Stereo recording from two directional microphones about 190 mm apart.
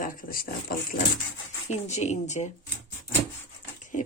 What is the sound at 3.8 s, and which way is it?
Pig, 40° left (ahead or behind).